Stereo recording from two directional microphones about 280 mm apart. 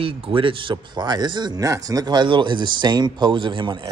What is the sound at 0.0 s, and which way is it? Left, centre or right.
Speech, centre.